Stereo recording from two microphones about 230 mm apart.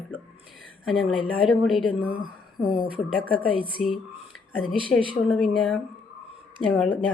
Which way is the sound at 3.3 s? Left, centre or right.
Left.